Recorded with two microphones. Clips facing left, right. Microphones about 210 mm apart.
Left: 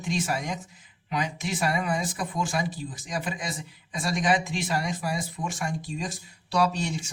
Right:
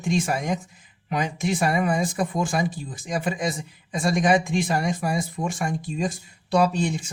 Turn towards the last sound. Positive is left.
turn(degrees=-50)  # may be behind; listen again after turning